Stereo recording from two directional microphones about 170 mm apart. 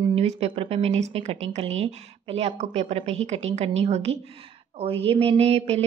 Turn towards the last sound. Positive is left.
turn(degrees=-40)  # may be behind; listen again after turning